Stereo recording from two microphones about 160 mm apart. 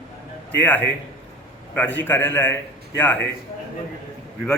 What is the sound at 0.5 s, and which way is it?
A man's voice, 10° left (ahead or behind).